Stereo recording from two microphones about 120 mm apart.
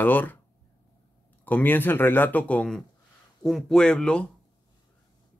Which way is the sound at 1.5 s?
15° left (ahead or behind).